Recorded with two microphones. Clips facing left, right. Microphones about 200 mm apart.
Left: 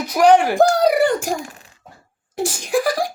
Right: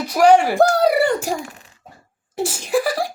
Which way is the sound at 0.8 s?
Centre (ahead or behind).